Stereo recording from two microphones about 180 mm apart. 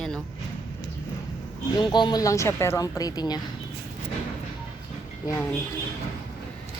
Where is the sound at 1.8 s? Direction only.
25° left (ahead or behind).